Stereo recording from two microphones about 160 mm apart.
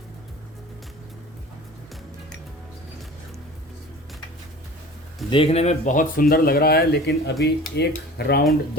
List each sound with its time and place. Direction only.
5.3 s speech: 35° left (ahead or behind); by 8.4 s 85° left